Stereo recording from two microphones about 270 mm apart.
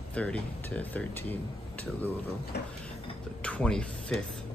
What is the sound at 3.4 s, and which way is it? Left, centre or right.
Speech, centre.